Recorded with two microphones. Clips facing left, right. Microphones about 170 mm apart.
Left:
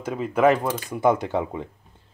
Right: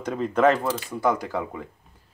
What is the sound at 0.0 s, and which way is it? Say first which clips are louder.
Speech: left 1 dB; 5° left (ahead or behind).